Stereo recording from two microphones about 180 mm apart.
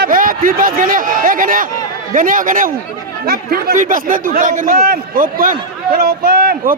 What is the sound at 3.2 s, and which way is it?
A man's voice, 60° right (ahead or behind).